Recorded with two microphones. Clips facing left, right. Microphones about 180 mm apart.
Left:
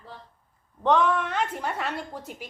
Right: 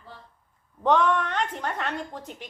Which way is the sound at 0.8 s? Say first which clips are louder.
Even; centre (ahead or behind).